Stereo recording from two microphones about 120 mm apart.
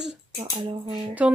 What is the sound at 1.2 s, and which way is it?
Speech, 10° right (ahead or behind).